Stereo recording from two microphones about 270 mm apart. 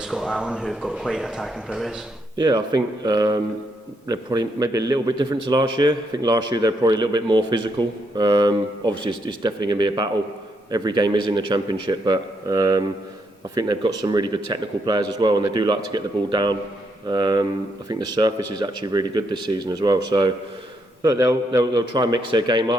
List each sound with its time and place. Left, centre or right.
0.1 s speech: centre
2.4 s a man's voice: centre
18.3 s speech: right
18.6 s a man's voice: centre